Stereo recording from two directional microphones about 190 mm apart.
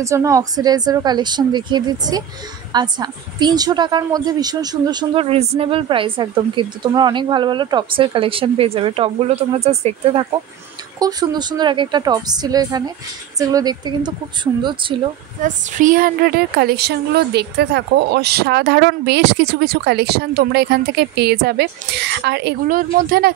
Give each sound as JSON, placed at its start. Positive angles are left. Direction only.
{"t": 0.0, "sound": "a woman's voice", "side_deg": -15}
{"t": 11.0, "sound": "a woman's voice", "side_deg": -20}
{"t": 15.4, "sound": "a woman's voice", "side_deg": -45}